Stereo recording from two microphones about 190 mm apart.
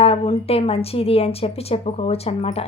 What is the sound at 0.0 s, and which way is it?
Speech, 30° left (ahead or behind).